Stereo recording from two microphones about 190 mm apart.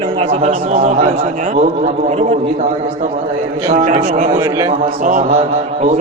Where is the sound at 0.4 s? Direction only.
35° right (ahead or behind).